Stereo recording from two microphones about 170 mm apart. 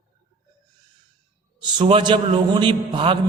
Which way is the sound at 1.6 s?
30° right (ahead or behind).